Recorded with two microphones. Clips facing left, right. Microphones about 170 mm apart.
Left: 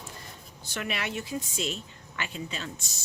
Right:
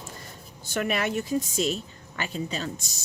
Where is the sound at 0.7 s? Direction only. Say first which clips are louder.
Right 7 dB; 45° right (ahead or behind).